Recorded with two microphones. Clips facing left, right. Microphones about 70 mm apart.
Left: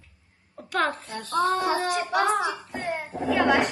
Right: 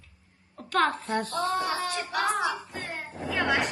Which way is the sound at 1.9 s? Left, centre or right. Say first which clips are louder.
Left 5 dB; centre.